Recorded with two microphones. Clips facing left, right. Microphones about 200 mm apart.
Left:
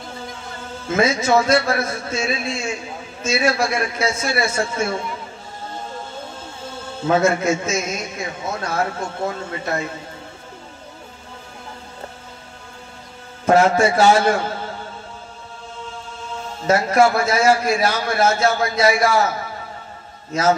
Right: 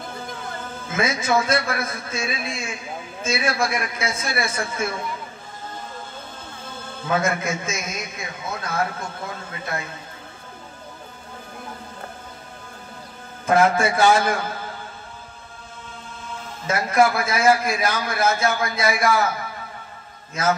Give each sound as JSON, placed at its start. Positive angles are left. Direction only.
{"t": 1.0, "sound": "a man's voice", "side_deg": 25}
{"t": 7.0, "sound": "a man's voice", "side_deg": 25}
{"t": 13.5, "sound": "a man's voice", "side_deg": 30}
{"t": 16.7, "sound": "a man's voice", "side_deg": 30}